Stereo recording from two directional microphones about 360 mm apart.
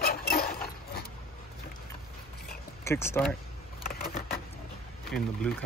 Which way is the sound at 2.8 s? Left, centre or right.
Centre.